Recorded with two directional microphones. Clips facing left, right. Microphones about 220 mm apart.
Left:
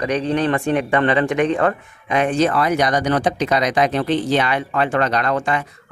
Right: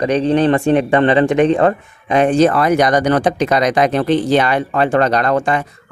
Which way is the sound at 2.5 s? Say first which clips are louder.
Right 5 dB; 50° right (ahead or behind).